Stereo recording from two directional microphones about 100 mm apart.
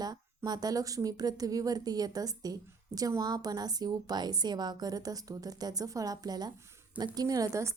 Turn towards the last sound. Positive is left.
turn(degrees=-35)  # may be behind; listen again after turning